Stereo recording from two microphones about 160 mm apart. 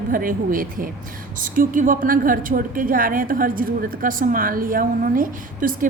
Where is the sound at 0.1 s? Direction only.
60° right (ahead or behind).